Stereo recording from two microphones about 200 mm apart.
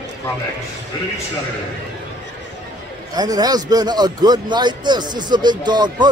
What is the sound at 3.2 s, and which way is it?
Speech, 20° right (ahead or behind).